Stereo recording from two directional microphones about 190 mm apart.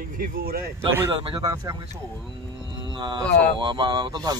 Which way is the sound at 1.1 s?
25° right (ahead or behind).